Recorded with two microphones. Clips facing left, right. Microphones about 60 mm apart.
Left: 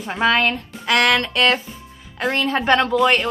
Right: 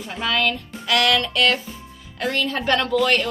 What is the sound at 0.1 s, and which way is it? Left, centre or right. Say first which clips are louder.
A woman's voice: left 5 dB; left.